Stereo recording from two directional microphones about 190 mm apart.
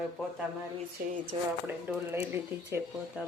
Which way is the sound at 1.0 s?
55° right (ahead or behind).